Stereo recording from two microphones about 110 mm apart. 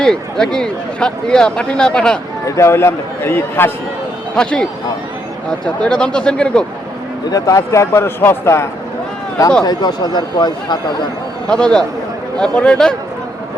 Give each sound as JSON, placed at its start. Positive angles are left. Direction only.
{"t": 0.0, "sound": "speech", "side_deg": 5}
{"t": 2.6, "sound": "a man's voice", "side_deg": 25}
{"t": 4.4, "sound": "speech", "side_deg": 5}
{"t": 7.3, "sound": "a man's voice", "side_deg": 35}
{"t": 9.6, "sound": "speech", "side_deg": 40}
{"t": 11.4, "sound": "speech", "side_deg": 5}